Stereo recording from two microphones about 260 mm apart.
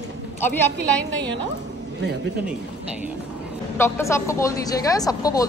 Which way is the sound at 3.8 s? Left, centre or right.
Centre.